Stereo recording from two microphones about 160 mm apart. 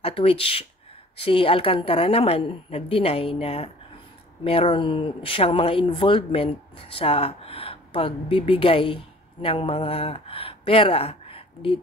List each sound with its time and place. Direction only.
0.0 s speech: 35° left (ahead or behind)